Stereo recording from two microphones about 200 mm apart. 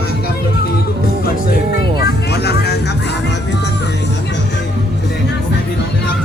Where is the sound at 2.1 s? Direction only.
55° left (ahead or behind).